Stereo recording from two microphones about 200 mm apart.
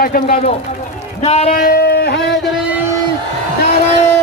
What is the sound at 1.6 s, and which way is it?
Boat, 50° left (ahead or behind).